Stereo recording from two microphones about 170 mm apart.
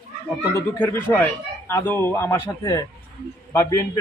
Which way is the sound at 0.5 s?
15° left (ahead or behind).